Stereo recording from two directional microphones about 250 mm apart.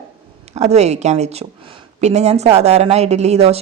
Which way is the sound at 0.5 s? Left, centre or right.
Right.